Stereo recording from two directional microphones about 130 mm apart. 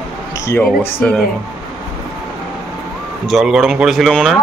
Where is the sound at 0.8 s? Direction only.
5° left (ahead or behind).